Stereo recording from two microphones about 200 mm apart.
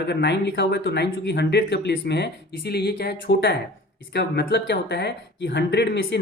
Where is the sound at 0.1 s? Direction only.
60° left (ahead or behind).